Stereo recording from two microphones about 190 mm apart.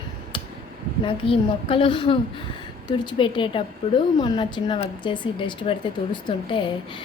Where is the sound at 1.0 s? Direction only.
30° left (ahead or behind).